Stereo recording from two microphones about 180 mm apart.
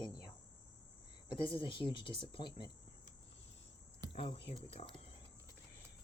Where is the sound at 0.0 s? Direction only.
25° left (ahead or behind).